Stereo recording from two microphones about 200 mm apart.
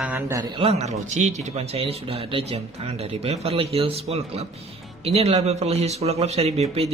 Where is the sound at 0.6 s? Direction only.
30° right (ahead or behind).